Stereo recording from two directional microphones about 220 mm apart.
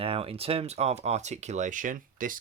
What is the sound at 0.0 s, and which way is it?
Speech, 25° right (ahead or behind).